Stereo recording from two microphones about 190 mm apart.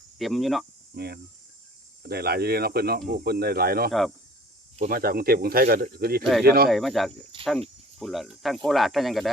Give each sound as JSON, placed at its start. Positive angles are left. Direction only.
{"t": 0.2, "sound": "speech", "side_deg": 0}
{"t": 0.9, "sound": "speech", "side_deg": -55}
{"t": 6.7, "sound": "speech", "side_deg": 0}